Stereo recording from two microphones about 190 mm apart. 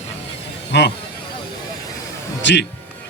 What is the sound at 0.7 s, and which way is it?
Speech, 60° left (ahead or behind).